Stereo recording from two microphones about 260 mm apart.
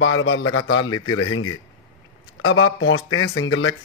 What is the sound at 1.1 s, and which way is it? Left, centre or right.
Speech, left.